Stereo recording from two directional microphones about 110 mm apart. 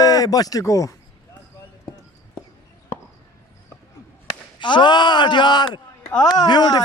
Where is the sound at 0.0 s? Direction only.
35° left (ahead or behind).